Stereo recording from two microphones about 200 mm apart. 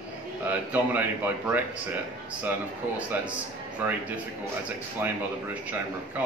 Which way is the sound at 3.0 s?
5° right (ahead or behind).